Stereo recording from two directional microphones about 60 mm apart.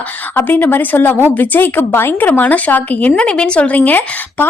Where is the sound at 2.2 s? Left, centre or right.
Left.